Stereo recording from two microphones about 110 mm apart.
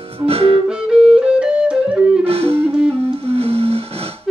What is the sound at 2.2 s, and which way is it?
Music, 60° right (ahead or behind).